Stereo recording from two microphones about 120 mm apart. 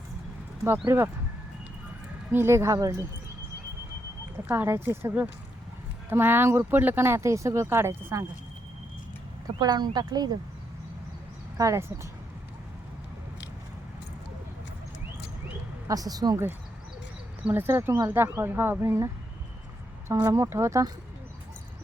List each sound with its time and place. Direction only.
0.9 s speech: 20° right (ahead or behind)
2.3 s speech: 20° right (ahead or behind)
4.4 s speech: 20° right (ahead or behind)
9.6 s speech: 35° right (ahead or behind)
11.5 s speech: 25° right (ahead or behind)
15.9 s speech: 30° right (ahead or behind)
17.4 s speech: 20° right (ahead or behind)